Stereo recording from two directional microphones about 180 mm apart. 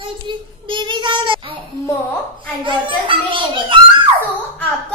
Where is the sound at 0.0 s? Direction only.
25° right (ahead or behind).